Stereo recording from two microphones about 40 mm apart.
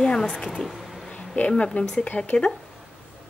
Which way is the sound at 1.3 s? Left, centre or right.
Left.